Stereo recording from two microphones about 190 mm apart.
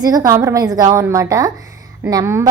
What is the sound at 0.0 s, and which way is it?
A woman's voice, 20° right (ahead or behind).